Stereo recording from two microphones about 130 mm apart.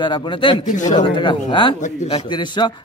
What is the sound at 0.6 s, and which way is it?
Speech, 70° left (ahead or behind).